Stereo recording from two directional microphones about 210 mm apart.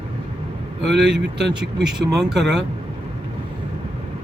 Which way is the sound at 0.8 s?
55° right (ahead or behind).